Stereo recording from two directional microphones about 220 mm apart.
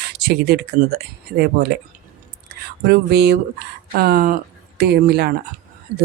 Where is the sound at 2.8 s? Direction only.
50° right (ahead or behind).